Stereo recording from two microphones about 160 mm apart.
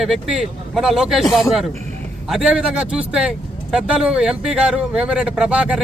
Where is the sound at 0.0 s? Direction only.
5° right (ahead or behind).